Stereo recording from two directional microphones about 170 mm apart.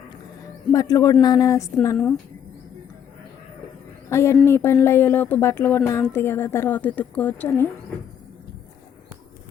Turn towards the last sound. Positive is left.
turn(degrees=15)  # may be behind; listen again after turning